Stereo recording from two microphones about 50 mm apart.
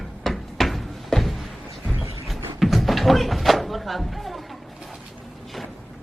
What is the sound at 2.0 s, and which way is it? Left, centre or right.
Music, right.